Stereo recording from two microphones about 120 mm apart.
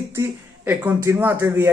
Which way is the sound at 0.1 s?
15° right (ahead or behind).